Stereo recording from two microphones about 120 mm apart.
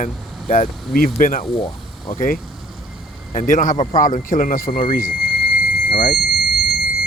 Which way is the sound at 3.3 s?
90° left.